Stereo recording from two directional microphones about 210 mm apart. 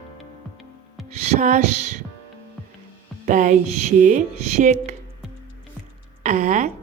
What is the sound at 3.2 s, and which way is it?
A woman's voice, 40° right (ahead or behind).